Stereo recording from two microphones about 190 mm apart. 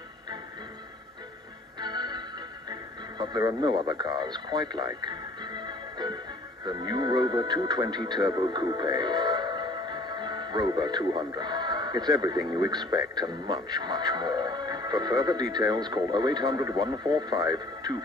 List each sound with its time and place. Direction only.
1.8 s music: 20° right (ahead or behind)
2.7 s radio: 20° right (ahead or behind)
6.6 s speech: 20° right (ahead or behind)